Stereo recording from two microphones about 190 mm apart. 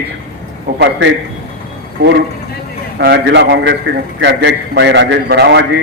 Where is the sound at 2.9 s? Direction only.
60° right (ahead or behind).